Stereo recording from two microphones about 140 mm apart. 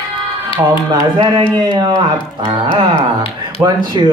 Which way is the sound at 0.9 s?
30° right (ahead or behind).